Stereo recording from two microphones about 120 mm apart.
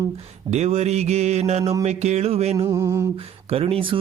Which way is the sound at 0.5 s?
65° right (ahead or behind).